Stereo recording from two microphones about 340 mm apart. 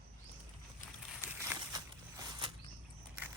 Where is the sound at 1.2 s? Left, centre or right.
Centre.